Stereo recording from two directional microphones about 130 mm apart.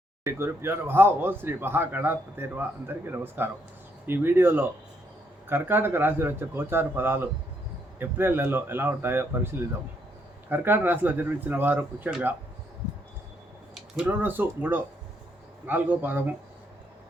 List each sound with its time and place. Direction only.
0.3 s speech: 20° right (ahead or behind)
13.7 s speech: 10° right (ahead or behind)